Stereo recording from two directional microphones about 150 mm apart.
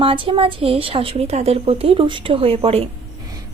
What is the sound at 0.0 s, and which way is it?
Speech, 35° right (ahead or behind).